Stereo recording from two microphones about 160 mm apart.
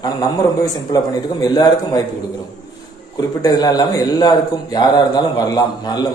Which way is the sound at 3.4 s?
25° left (ahead or behind).